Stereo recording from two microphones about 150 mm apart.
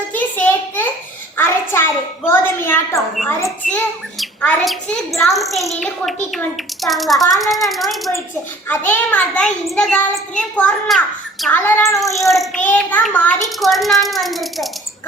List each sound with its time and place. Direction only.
0.1 s a sound: 10° left (ahead or behind)
2.3 s a child's voice: 15° left (ahead or behind)
4.4 s a child's voice: 5° left (ahead or behind)
8.6 s a child's voice: 15° left (ahead or behind)
11.5 s a child's voice: 20° left (ahead or behind)
12.2 s a child's voice: centre (ahead or behind)